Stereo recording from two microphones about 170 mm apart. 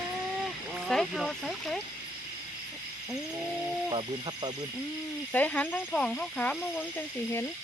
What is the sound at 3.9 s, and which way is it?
Speech, 25° right (ahead or behind).